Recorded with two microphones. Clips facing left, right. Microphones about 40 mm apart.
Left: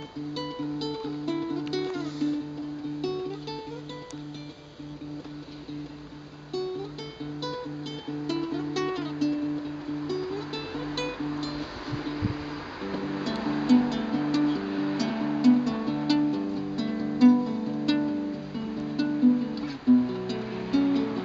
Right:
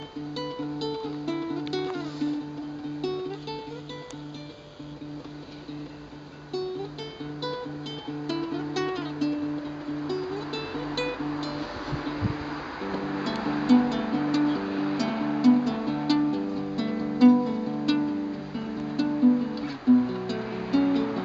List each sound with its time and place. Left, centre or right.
0.3 s music: centre
1.8 s music: right
8.1 s music: centre